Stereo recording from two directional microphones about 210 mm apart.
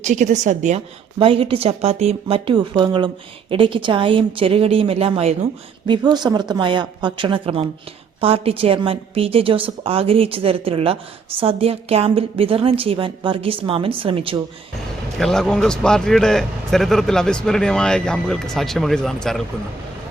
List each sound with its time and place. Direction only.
0.0 s a woman's voice: 35° right (ahead or behind)
15.2 s a man's voice: centre (ahead or behind)